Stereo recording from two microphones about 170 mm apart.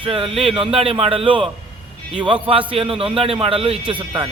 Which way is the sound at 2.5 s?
30° right (ahead or behind).